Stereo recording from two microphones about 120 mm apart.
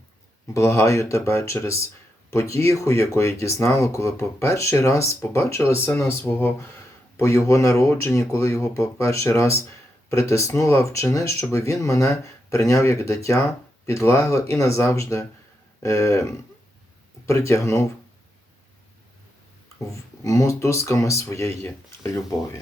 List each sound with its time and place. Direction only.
0.5 s speech: 25° left (ahead or behind)
17.2 s speech: 25° left (ahead or behind)
20.2 s speech: 25° left (ahead or behind)